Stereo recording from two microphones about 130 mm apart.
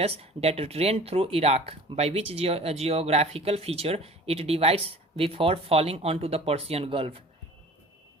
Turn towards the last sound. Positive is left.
turn(degrees=-45)  # may be behind; listen again after turning